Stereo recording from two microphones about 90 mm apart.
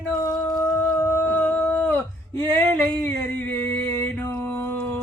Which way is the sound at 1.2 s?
15° left (ahead or behind).